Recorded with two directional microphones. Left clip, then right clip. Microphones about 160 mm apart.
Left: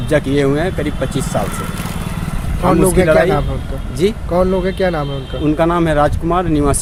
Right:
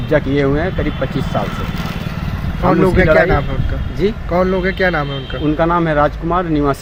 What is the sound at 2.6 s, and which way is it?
Speech, 15° left (ahead or behind).